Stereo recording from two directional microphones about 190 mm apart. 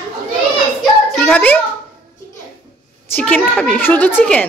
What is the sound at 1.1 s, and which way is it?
Speech, 5° left (ahead or behind).